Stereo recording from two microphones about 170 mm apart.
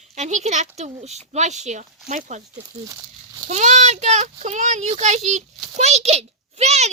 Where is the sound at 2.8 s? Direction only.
20° right (ahead or behind).